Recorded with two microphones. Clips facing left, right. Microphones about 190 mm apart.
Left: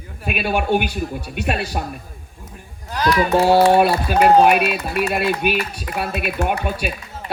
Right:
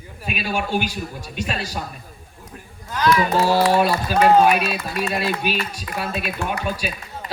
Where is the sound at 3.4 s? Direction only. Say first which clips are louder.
Left 5 dB; 60° left (ahead or behind).